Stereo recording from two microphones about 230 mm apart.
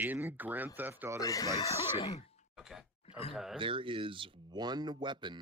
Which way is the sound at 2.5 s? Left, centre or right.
Centre.